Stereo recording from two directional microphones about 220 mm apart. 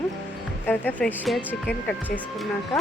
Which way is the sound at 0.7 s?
5° left (ahead or behind).